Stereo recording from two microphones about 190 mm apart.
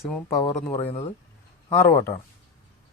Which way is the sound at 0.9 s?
30° left (ahead or behind).